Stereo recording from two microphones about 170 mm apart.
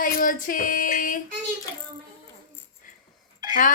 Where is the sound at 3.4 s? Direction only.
25° right (ahead or behind).